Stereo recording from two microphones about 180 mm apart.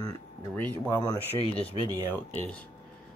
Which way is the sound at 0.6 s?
10° left (ahead or behind).